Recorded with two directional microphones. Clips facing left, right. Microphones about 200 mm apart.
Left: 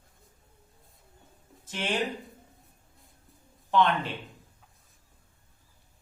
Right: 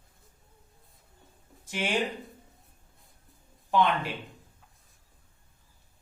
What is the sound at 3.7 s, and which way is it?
Speech, 10° right (ahead or behind).